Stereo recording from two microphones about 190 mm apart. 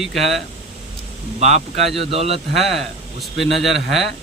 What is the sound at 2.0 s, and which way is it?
Speech, 30° right (ahead or behind).